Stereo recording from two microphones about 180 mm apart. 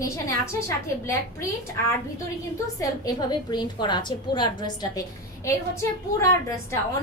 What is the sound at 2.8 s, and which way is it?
A woman's voice, 20° left (ahead or behind).